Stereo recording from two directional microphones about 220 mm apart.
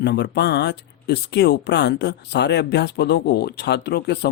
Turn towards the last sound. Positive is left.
turn(degrees=50)  # may be behind; listen again after turning